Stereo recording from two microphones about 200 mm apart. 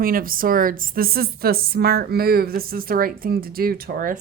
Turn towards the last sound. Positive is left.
turn(degrees=-40)  # may be behind; listen again after turning